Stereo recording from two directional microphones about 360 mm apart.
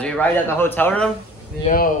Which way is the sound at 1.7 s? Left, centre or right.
Centre.